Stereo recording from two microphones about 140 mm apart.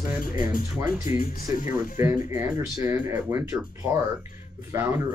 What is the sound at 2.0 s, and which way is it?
Speech, 15° right (ahead or behind).